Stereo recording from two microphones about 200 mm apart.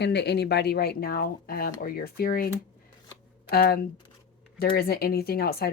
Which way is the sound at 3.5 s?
50° left (ahead or behind).